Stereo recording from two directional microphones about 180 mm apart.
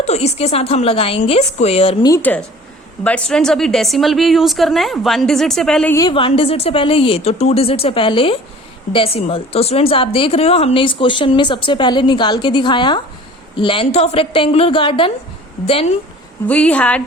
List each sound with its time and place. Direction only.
0.0 s a woman's voice: 35° left (ahead or behind)
2.0 s a woman's voice: 10° left (ahead or behind)
5.9 s a woman's voice: 20° left (ahead or behind)
16.5 s a woman's voice: 5° left (ahead or behind)